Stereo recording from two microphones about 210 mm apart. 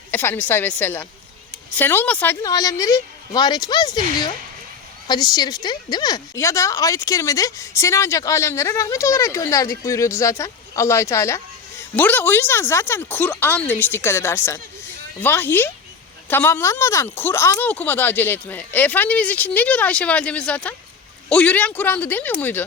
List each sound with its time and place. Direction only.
0.1 s a woman's voice: 10° left (ahead or behind)